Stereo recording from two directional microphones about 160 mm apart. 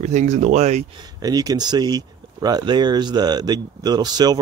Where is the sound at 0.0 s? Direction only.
50° right (ahead or behind).